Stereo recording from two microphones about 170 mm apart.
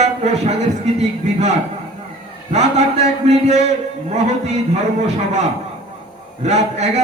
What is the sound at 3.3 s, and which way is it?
Speech, 40° right (ahead or behind).